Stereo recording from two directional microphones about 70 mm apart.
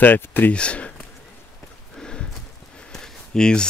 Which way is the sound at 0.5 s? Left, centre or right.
Centre.